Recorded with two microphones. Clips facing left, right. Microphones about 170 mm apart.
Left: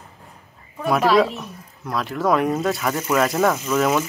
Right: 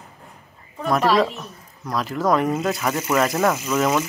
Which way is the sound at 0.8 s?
Centre (ahead or behind).